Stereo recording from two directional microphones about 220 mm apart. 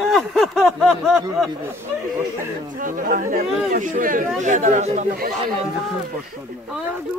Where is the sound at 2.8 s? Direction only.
35° right (ahead or behind).